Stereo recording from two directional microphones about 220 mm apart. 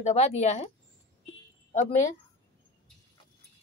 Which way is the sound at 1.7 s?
35° left (ahead or behind).